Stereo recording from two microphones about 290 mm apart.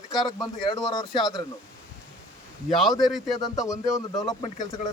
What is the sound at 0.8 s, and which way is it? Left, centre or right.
Speech, centre.